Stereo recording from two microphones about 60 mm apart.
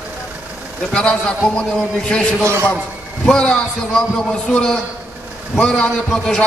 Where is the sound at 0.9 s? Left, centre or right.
Centre.